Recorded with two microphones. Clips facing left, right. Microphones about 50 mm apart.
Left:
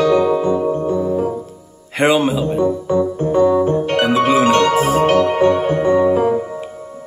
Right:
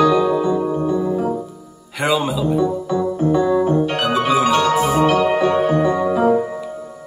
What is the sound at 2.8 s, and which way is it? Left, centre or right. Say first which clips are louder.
Keyboard: left 2 dB; left.